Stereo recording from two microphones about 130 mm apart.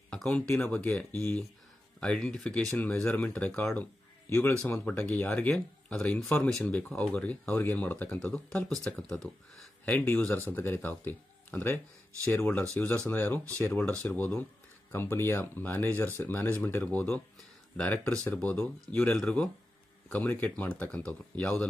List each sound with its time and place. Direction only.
0.1 s speech: 10° left (ahead or behind)